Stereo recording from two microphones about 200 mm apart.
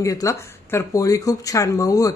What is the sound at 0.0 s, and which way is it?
Speech, 15° left (ahead or behind).